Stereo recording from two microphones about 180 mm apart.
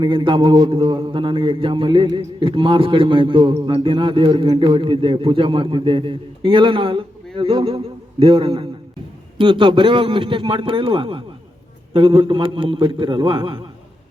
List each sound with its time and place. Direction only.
0.0 s a man's voice: 25° right (ahead or behind)